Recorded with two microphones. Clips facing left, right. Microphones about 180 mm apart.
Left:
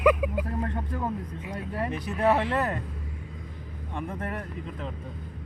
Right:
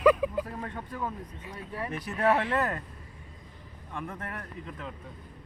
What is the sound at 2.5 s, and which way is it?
Speech, 20° left (ahead or behind).